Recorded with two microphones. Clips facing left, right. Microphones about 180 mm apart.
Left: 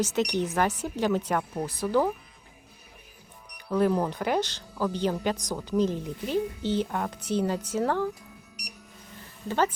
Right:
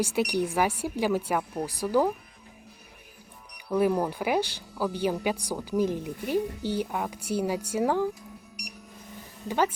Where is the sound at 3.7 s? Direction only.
10° right (ahead or behind).